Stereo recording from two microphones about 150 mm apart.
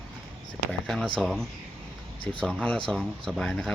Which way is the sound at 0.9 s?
Centre (ahead or behind).